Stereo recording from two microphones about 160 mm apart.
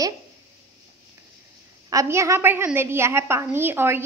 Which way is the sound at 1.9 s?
20° right (ahead or behind).